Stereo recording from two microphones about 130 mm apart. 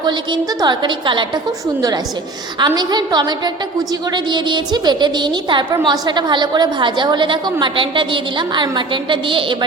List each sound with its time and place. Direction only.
0.0 s a woman's voice: 35° right (ahead or behind)
2.6 s a woman's voice: 35° right (ahead or behind)